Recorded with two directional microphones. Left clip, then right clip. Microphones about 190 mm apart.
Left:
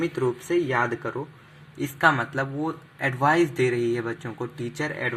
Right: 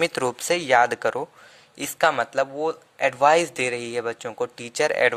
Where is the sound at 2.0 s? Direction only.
45° right (ahead or behind).